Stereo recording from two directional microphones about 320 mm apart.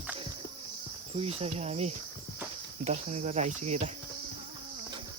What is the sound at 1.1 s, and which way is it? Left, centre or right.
Cricket, centre.